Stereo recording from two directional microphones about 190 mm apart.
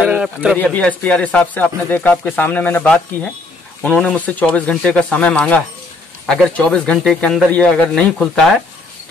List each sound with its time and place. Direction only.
0.0 s speech: 5° right (ahead or behind)
0.6 s speech: 5° left (ahead or behind)